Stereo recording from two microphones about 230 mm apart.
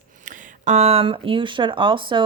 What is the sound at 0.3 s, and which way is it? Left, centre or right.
Speech, right.